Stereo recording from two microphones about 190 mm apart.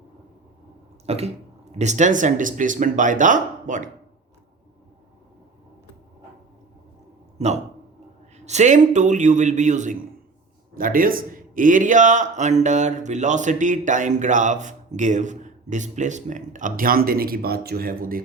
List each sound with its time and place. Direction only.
1.0 s speech: 35° right (ahead or behind)
7.3 s a man's voice: 35° right (ahead or behind)